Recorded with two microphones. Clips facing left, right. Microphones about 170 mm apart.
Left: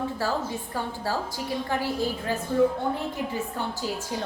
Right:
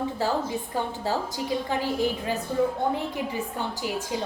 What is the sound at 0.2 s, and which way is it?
Speech, 20° right (ahead or behind).